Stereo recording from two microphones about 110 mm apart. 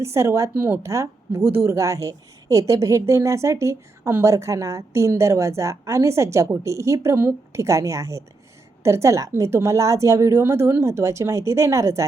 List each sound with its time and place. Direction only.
0.0 s a woman's voice: 25° right (ahead or behind)